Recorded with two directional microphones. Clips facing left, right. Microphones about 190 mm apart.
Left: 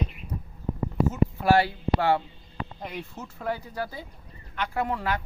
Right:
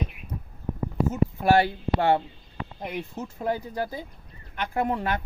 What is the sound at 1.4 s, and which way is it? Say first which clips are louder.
Speech: right 1 dB; 20° right (ahead or behind).